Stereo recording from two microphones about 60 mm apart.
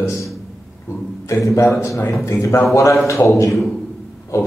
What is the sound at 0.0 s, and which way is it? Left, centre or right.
Speech, left.